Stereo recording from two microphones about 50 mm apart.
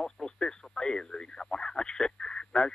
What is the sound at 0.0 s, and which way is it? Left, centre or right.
Speech, centre.